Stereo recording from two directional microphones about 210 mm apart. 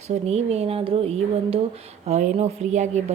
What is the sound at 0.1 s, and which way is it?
Speech, 30° right (ahead or behind).